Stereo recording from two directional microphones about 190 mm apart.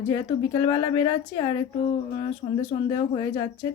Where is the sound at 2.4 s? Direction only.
35° left (ahead or behind).